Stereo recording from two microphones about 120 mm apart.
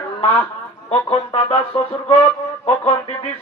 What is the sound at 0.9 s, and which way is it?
Speech, 50° left (ahead or behind).